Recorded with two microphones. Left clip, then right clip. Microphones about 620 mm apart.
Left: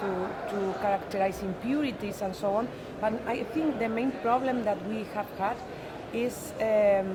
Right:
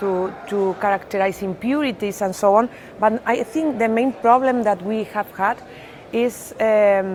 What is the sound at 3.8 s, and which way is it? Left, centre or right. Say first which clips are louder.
A woman's voice: right 12 dB; right.